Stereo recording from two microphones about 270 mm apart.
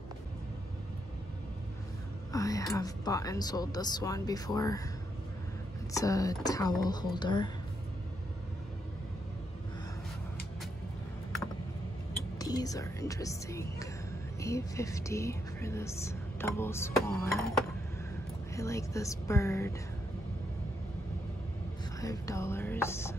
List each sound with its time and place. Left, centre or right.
2.3 s speech: centre
5.9 s speech: centre
12.4 s speech: centre
18.5 s speech: centre
22.0 s speech: centre